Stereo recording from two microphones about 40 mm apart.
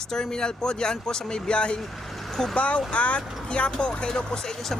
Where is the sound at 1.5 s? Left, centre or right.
Left.